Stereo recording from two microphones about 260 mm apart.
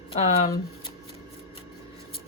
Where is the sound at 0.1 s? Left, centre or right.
Left.